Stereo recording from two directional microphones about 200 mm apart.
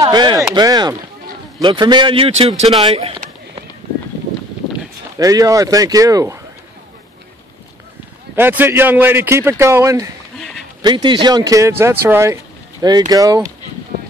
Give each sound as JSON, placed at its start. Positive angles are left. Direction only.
{"t": 0.0, "sound": "a man's voice", "side_deg": -20}
{"t": 5.2, "sound": "a man's voice", "side_deg": -15}
{"t": 8.4, "sound": "a man's voice", "side_deg": -10}